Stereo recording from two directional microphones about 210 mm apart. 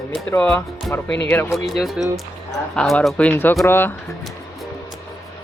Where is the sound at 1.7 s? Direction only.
Centre (ahead or behind).